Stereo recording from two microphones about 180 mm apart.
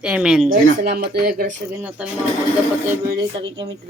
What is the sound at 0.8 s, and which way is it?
Speech, 60° right (ahead or behind).